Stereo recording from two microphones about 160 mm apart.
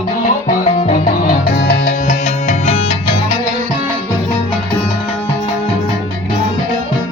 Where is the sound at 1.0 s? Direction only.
65° left (ahead or behind); by 1.9 s 85° left.